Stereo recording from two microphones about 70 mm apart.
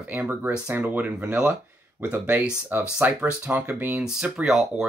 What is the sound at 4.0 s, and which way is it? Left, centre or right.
Speech, centre.